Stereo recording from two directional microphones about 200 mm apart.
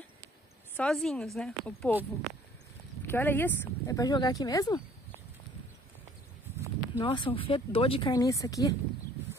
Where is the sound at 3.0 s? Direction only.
10° left (ahead or behind).